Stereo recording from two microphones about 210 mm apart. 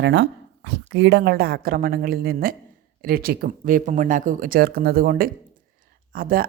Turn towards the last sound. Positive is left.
turn(degrees=-45)  # may be behind; listen again after turning